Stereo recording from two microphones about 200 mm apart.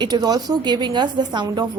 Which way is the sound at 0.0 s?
20° right (ahead or behind).